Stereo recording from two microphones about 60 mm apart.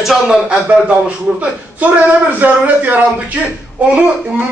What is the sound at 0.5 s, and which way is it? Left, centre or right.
A man's voice, centre.